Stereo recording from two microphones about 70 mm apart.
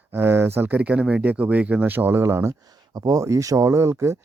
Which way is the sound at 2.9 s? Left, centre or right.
Right.